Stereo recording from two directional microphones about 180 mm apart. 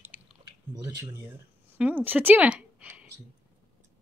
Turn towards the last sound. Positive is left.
turn(degrees=-5)  # may be behind; listen again after turning